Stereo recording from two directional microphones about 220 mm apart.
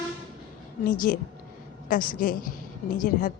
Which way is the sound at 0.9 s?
40° left (ahead or behind).